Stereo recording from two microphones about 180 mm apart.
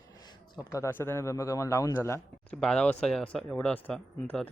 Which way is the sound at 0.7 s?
15° left (ahead or behind).